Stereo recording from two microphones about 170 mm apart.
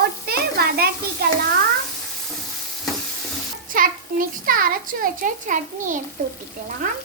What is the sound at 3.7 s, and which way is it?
A child's voice, 55° right (ahead or behind).